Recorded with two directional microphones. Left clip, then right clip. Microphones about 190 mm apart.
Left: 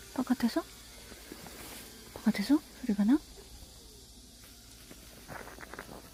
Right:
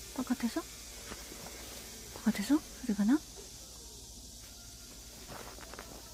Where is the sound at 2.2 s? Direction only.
25° left (ahead or behind).